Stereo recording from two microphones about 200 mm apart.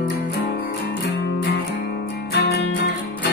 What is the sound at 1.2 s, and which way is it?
Music, 65° left (ahead or behind).